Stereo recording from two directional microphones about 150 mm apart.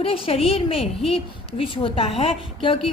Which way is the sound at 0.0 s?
40° left (ahead or behind).